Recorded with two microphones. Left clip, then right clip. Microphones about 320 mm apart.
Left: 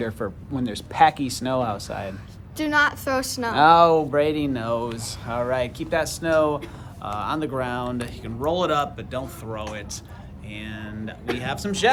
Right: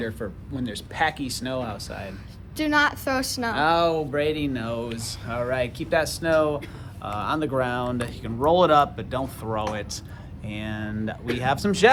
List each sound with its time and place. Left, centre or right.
0.0 s speech: centre
2.6 s speech: centre
3.5 s speech: left; by 11.9 s centre